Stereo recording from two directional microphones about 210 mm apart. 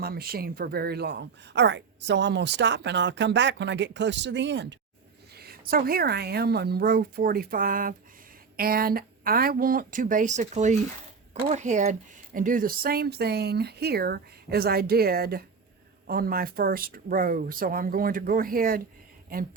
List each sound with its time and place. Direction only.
0.0 s speech: 45° right (ahead or behind)